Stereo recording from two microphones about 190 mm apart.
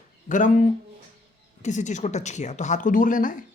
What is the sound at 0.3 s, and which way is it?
Speech, 40° left (ahead or behind).